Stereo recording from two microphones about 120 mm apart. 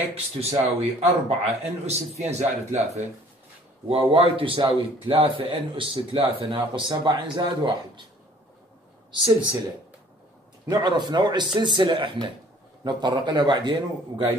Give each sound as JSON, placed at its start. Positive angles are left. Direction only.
{"t": 0.1, "sound": "a man's voice", "side_deg": -60}
{"t": 3.9, "sound": "speech", "side_deg": -50}
{"t": 9.1, "sound": "speech", "side_deg": -35}
{"t": 10.7, "sound": "speech", "side_deg": -35}